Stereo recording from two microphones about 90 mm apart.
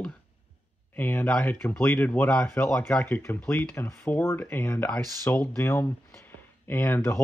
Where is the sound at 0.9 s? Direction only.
20° left (ahead or behind).